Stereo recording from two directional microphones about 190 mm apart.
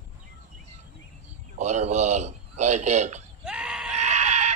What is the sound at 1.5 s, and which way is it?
A man's voice, 40° right (ahead or behind).